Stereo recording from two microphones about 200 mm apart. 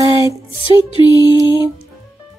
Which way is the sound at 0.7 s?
20° left (ahead or behind).